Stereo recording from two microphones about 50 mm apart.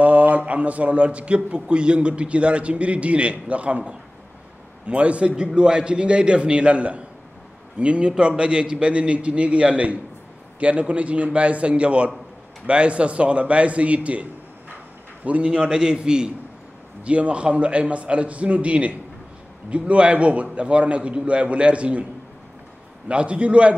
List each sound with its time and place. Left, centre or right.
0.0 s a man's voice: right
15.4 s a man's voice: centre
23.0 s a man's voice: right